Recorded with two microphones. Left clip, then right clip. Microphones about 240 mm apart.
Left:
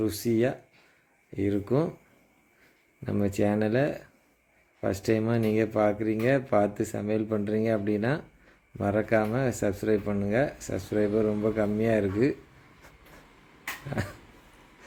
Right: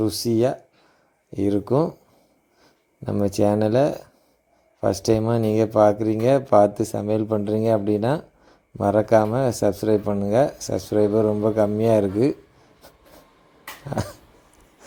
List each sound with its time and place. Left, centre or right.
0.0 s speech: right
3.1 s speech: right
5.0 s speech: right